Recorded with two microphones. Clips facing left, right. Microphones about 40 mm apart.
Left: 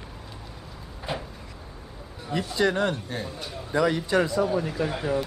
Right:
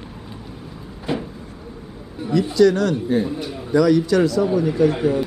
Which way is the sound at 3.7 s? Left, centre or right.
Left.